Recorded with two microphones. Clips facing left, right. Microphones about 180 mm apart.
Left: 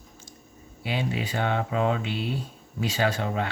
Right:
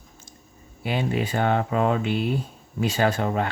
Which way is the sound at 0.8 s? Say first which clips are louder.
Right 4 dB; 50° right (ahead or behind).